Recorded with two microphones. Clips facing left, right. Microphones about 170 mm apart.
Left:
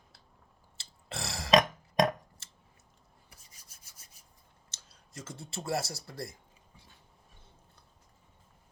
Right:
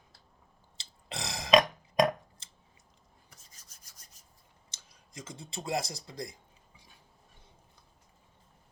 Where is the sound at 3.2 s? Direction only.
10° left (ahead or behind).